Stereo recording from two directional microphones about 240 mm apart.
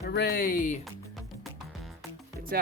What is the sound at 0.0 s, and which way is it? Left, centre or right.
Speech, left.